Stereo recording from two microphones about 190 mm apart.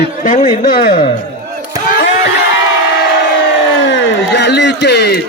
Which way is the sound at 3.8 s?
75° left (ahead or behind).